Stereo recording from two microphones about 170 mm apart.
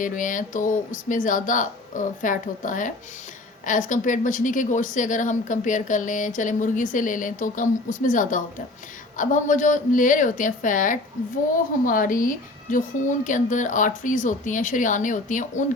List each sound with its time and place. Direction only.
0.0 s a woman's voice: 50° left (ahead or behind)